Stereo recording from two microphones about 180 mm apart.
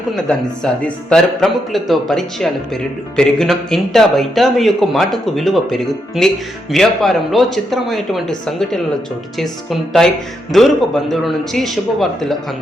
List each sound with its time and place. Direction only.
0.1 s speech: centre (ahead or behind)